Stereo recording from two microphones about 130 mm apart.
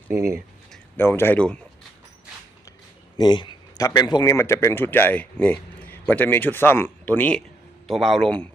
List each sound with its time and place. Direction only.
0.9 s speech: 15° left (ahead or behind)
3.2 s a sound: 35° left (ahead or behind)
3.8 s speech: 30° left (ahead or behind); by 7.4 s 10° left (ahead or behind)
7.9 s a man's voice: centre (ahead or behind)